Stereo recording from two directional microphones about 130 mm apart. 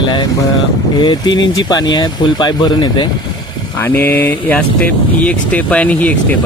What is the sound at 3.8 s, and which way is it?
Speech, 15° left (ahead or behind).